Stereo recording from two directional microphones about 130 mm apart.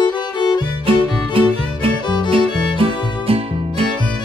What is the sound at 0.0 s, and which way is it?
Music, 35° left (ahead or behind).